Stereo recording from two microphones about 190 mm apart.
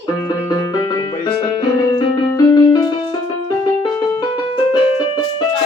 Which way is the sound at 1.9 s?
20° left (ahead or behind).